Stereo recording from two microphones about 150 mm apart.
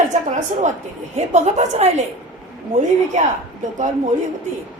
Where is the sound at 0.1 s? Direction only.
55° right (ahead or behind).